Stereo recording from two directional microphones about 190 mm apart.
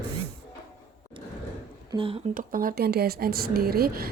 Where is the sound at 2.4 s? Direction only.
50° right (ahead or behind).